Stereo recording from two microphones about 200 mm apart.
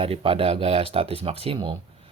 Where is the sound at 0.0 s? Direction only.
30° right (ahead or behind).